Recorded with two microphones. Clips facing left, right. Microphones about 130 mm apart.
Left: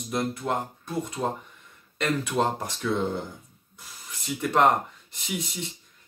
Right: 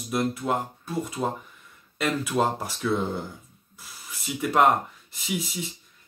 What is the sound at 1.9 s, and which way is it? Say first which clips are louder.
Speech: even; 5° right (ahead or behind).